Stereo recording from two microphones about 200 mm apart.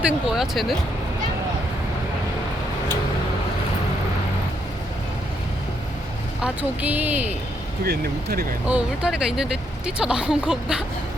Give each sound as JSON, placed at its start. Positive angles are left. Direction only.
{"t": 0.0, "sound": "speech", "side_deg": 0}
{"t": 6.4, "sound": "speech", "side_deg": -10}
{"t": 7.9, "sound": "speech", "side_deg": -50}
{"t": 8.6, "sound": "speech", "side_deg": -5}